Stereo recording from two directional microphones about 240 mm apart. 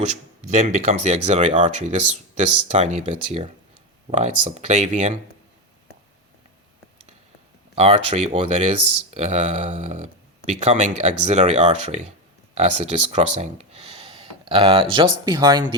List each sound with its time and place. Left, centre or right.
0.0 s speech: right
7.8 s speech: right